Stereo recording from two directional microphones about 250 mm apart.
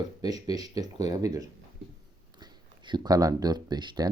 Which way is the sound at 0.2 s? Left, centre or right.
Centre.